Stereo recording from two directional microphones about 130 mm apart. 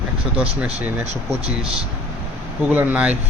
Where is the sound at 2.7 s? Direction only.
15° right (ahead or behind).